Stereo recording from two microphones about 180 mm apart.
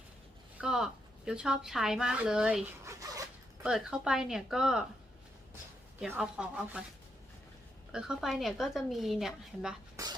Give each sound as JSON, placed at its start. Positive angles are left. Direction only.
{"t": 0.6, "sound": "a woman's voice", "side_deg": -5}
{"t": 6.0, "sound": "a woman's voice", "side_deg": -5}
{"t": 7.9, "sound": "a woman's voice", "side_deg": -5}
{"t": 10.0, "sound": "a sound", "side_deg": -20}